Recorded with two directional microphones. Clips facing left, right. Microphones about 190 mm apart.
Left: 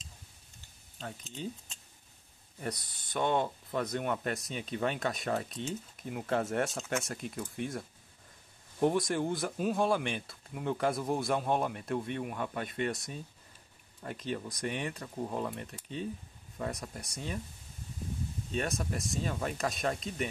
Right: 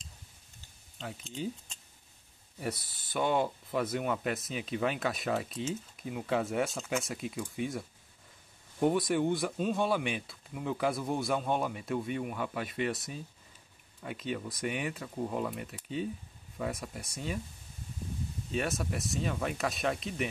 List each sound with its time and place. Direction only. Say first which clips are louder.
0.9 s speech: right 1 dB; centre (ahead or behind)
2.6 s speech: right 2 dB; 5° right (ahead or behind)
18.5 s speech: right 1 dB; 5° right (ahead or behind)